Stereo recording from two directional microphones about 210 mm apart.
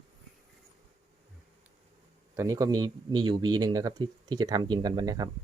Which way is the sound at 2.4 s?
15° right (ahead or behind).